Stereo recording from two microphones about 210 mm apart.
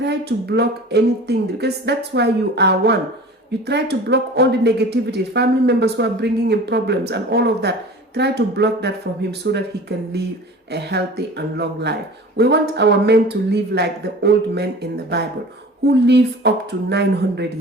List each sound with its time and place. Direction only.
0.0 s speech: 50° right (ahead or behind)
10.7 s speech: 50° right (ahead or behind)